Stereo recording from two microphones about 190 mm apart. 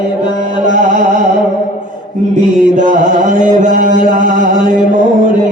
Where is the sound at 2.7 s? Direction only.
40° right (ahead or behind).